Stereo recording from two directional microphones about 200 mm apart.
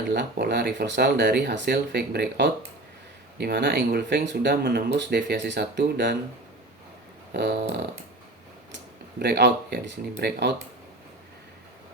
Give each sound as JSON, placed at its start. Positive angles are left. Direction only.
{"t": 0.1, "sound": "speech", "side_deg": -55}
{"t": 7.3, "sound": "speech", "side_deg": -60}
{"t": 8.7, "sound": "speech", "side_deg": -55}